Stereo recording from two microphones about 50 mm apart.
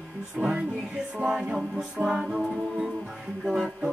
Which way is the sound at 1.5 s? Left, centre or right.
Centre.